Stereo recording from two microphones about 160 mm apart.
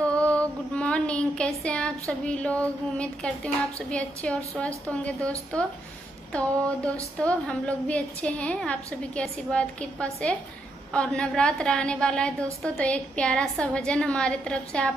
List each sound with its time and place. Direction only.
0.1 s child singing: 5° left (ahead or behind)
3.9 s a woman's voice: 5° left (ahead or behind)
6.3 s a woman's voice: 5° left (ahead or behind)